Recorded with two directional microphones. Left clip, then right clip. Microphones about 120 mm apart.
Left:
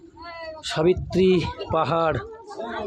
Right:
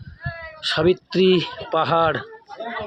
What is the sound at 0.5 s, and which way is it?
Speech, 10° right (ahead or behind).